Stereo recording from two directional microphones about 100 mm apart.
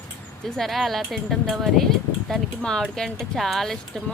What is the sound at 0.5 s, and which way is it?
Speech, centre (ahead or behind).